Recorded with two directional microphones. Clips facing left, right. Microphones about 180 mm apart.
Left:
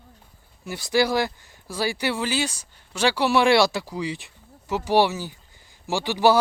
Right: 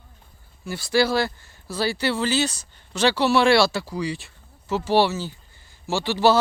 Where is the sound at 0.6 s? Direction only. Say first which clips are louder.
Right 1 dB; 15° left (ahead or behind).